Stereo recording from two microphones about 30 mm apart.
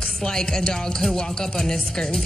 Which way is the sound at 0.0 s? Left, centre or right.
Centre.